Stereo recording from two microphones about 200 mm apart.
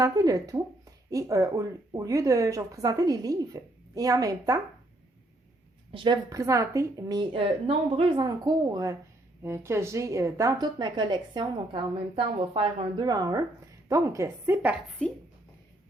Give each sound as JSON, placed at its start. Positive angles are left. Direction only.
{"t": 0.0, "sound": "speech", "side_deg": -15}
{"t": 5.9, "sound": "a woman's voice", "side_deg": -25}